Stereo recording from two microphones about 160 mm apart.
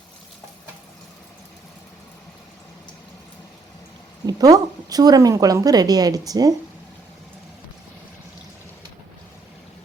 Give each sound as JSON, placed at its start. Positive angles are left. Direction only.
{"t": 4.3, "sound": "a woman's voice", "side_deg": -25}